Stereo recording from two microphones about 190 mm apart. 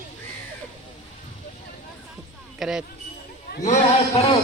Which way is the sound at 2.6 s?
Centre (ahead or behind).